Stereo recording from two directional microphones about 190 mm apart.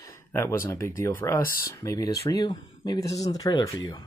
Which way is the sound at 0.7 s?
15° left (ahead or behind).